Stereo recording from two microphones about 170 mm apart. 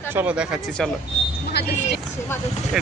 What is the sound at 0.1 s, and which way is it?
Speech, 10° right (ahead or behind).